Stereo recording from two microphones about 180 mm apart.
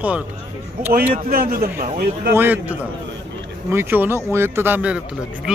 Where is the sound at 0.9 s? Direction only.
55° right (ahead or behind).